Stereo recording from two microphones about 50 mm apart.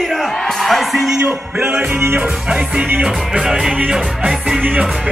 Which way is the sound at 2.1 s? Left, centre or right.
Right.